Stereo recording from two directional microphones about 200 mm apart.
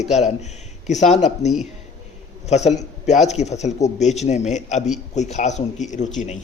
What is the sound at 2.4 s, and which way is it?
Speech, 35° left (ahead or behind).